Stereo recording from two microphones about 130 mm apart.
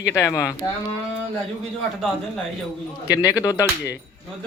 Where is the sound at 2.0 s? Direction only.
Centre (ahead or behind).